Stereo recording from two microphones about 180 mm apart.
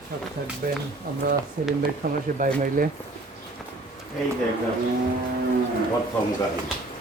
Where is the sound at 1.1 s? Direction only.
50° right (ahead or behind).